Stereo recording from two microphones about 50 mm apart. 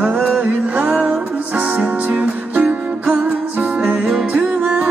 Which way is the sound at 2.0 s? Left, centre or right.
Right.